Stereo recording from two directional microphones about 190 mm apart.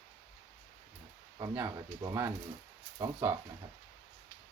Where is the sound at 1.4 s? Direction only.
15° right (ahead or behind).